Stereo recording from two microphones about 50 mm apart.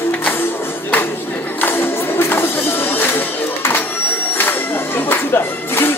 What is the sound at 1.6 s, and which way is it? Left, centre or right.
Music, left.